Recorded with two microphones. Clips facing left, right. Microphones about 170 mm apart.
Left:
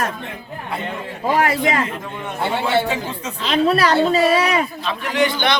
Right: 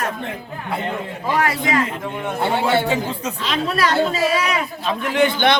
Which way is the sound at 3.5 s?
30° left (ahead or behind).